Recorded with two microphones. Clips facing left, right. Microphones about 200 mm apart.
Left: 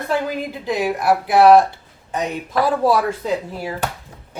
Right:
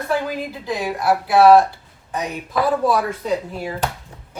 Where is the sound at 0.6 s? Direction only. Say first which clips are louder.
Left 2 dB; 20° left (ahead or behind).